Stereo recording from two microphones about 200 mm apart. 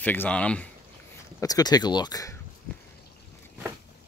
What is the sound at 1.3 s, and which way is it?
Speech, 20° left (ahead or behind).